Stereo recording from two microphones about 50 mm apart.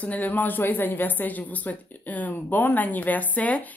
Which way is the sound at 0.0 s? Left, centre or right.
Left.